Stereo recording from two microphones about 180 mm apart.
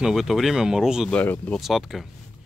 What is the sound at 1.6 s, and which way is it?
Speech, centre (ahead or behind).